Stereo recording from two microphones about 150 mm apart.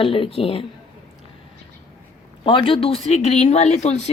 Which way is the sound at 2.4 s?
35° left (ahead or behind).